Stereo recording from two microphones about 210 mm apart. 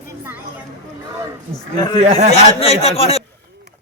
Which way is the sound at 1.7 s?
20° left (ahead or behind).